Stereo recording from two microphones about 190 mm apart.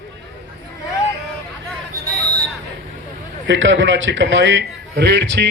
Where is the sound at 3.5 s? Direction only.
75° right (ahead or behind).